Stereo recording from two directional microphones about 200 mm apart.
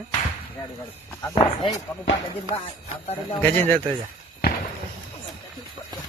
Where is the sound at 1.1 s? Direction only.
15° left (ahead or behind).